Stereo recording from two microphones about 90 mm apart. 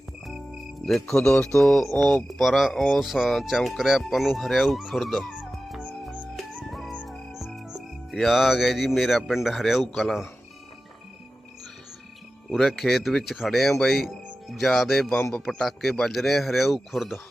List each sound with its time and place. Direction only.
0.9 s speech: 5° left (ahead or behind)
5.3 s music: 5° right (ahead or behind)
9.9 s speech: centre (ahead or behind)
12.5 s speech: centre (ahead or behind)